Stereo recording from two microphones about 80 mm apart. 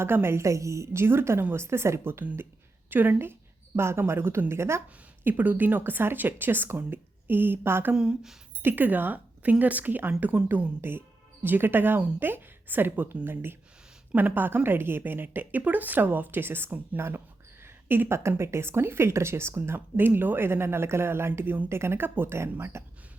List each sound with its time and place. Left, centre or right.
0.0 s a woman's voice: right
7.9 s speech: centre
8.6 s a woman's voice: right